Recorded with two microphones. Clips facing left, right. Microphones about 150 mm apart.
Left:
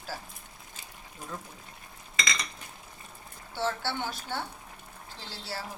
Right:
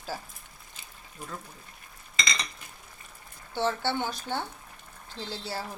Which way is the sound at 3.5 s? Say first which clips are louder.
Right 3 dB; 20° right (ahead or behind).